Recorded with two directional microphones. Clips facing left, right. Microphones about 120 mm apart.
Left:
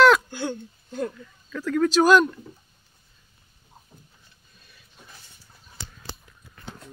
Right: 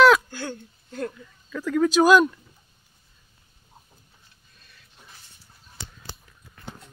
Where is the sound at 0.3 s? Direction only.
15° left (ahead or behind).